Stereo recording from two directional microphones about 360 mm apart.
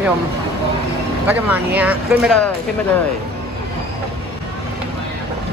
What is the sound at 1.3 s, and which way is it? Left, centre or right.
Speech, centre.